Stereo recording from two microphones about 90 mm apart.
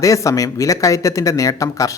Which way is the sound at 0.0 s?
35° left (ahead or behind).